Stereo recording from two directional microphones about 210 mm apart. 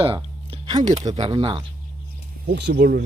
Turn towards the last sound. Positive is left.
turn(degrees=-50)  # may be behind; listen again after turning